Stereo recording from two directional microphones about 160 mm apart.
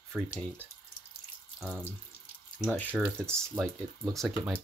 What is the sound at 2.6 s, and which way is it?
Speech, 5° left (ahead or behind).